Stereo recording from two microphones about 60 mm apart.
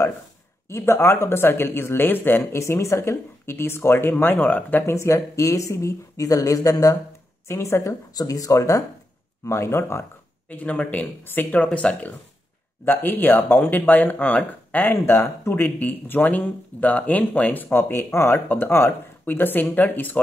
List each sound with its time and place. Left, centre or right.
0.7 s speech: left
2.6 s speech: left
4.1 s speech: left
4.8 s speech: left
7.4 s speech: left
10.5 s speech: left
12.8 s speech: left